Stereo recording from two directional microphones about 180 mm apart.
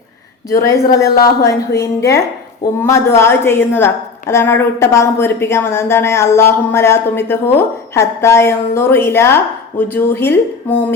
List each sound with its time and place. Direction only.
1.1 s a woman's voice: 20° left (ahead or behind)